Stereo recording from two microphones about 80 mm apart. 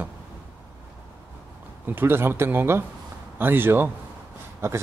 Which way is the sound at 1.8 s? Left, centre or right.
Right.